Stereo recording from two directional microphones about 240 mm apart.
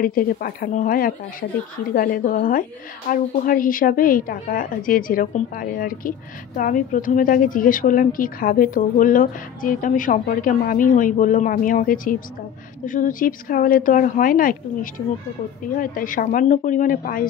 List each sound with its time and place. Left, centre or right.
0.0 s a woman's voice: left